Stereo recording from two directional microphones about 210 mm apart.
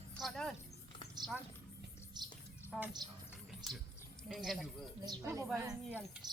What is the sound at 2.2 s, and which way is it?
Music, 20° right (ahead or behind).